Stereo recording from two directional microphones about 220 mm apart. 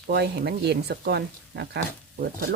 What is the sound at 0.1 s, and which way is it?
Speech, 50° right (ahead or behind).